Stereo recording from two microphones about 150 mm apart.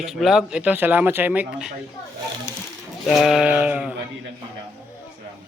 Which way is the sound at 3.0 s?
Centre (ahead or behind).